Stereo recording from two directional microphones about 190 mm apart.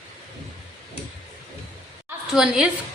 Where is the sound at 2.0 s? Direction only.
5° right (ahead or behind).